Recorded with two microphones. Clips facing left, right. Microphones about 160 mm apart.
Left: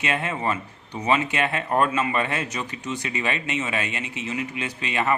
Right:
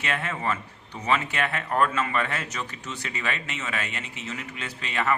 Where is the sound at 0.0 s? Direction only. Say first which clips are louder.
Left 3 dB; 20° left (ahead or behind).